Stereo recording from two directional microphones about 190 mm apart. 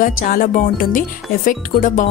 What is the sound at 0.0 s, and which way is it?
Speech, 45° left (ahead or behind).